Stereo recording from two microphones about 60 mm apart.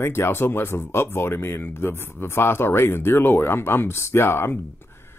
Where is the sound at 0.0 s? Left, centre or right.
Left.